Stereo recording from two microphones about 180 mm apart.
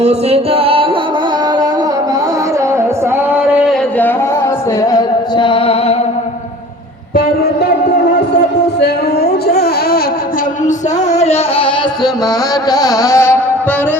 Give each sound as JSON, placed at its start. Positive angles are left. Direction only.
{"t": 0.0, "sound": "music", "side_deg": -35}
{"t": 3.3, "sound": "a sound", "side_deg": -5}
{"t": 4.8, "sound": "music", "side_deg": 20}
{"t": 8.8, "sound": "a sound", "side_deg": 60}
{"t": 11.1, "sound": "music", "side_deg": 35}
{"t": 12.7, "sound": "carnatic music", "side_deg": 20}